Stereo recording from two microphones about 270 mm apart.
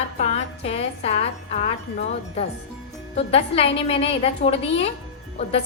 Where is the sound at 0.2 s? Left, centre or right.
Left.